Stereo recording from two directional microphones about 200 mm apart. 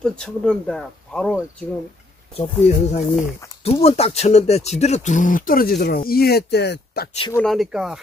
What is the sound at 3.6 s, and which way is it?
Speech, 30° left (ahead or behind).